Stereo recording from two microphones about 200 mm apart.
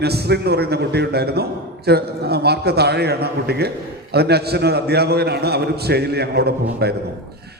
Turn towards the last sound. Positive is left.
turn(degrees=-55)  # may be behind; listen again after turning